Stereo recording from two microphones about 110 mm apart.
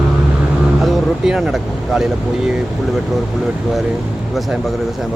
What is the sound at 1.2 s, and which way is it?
Speech, 5° right (ahead or behind).